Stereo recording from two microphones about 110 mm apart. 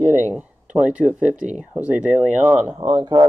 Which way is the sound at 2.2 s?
90° right.